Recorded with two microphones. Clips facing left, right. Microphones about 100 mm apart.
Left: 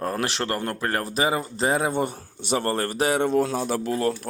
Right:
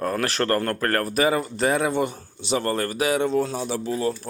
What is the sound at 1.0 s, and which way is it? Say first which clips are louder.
Speech: right 2 dB; 25° left (ahead or behind).